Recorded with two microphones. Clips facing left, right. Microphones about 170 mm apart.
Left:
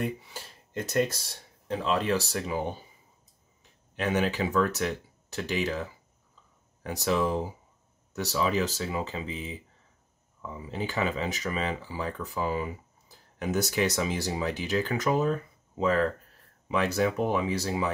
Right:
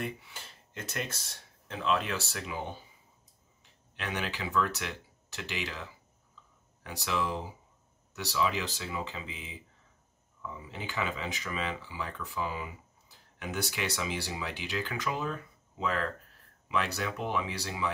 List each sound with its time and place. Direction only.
0.3 s speech: 40° left (ahead or behind)
3.9 s speech: 45° left (ahead or behind)